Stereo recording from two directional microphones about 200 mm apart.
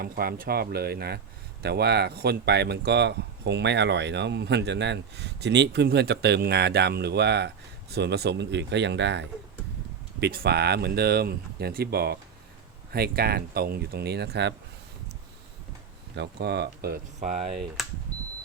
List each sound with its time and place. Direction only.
0.0 s speech: 50° right (ahead or behind)
16.1 s speech: 55° right (ahead or behind); by 17.4 s 35° right (ahead or behind)
17.8 s speech: centre (ahead or behind)